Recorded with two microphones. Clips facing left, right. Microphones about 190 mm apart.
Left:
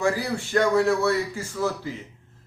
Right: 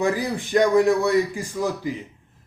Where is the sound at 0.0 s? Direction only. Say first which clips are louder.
Right 2 dB; 15° right (ahead or behind).